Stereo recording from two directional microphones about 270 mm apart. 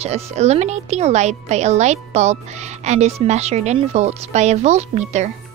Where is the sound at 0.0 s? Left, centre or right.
Right.